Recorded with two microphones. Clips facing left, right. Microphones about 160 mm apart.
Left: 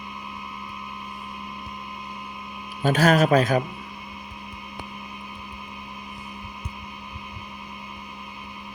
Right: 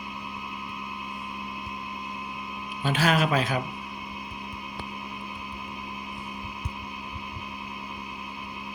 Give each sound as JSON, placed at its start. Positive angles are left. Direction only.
{"t": 2.8, "sound": "a man's voice", "side_deg": 45}